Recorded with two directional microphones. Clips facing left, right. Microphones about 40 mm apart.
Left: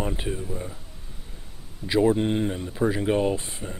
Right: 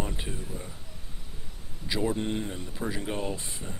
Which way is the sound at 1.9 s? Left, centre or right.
Left.